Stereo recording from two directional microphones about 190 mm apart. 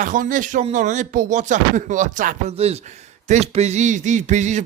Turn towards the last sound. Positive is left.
turn(degrees=-40)  # may be behind; listen again after turning